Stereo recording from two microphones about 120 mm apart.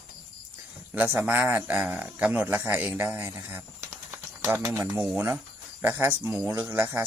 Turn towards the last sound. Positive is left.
turn(degrees=-20)  # may be behind; listen again after turning